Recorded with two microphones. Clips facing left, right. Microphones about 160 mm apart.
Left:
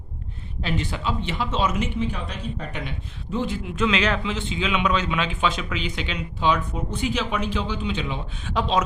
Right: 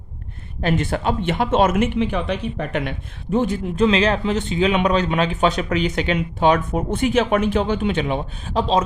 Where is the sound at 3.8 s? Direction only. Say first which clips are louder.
Right 5 dB; 35° right (ahead or behind); by 8.2 s 55° right (ahead or behind).